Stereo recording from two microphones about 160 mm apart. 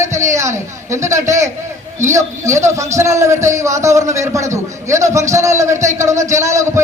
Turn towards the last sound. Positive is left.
turn(degrees=-20)  # may be behind; listen again after turning